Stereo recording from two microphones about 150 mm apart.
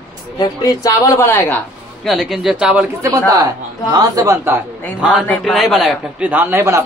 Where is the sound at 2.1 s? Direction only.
Centre (ahead or behind).